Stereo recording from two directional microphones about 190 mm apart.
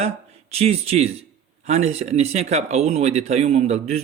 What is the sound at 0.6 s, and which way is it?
Speech, 35° right (ahead or behind).